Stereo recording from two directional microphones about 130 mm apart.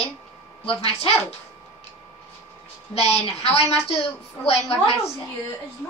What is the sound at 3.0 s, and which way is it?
Child singing, 55° left (ahead or behind).